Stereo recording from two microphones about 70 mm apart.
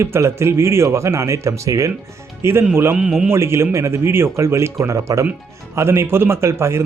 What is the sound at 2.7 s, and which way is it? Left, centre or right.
Speech, right.